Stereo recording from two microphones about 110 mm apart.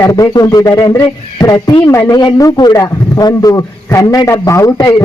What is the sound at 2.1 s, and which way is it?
A man's voice, 35° left (ahead or behind).